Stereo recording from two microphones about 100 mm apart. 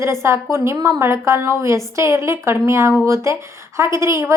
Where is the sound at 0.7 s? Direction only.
40° right (ahead or behind).